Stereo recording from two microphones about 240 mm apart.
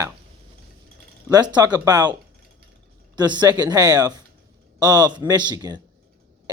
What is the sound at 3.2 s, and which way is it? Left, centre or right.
Speech, centre.